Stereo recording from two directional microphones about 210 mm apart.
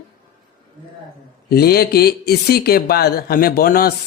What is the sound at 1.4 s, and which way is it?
Speech, 45° left (ahead or behind).